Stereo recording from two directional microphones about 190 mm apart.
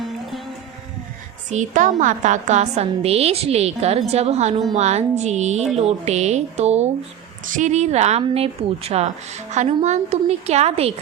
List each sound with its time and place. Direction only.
1.5 s a woman's voice: 40° right (ahead or behind)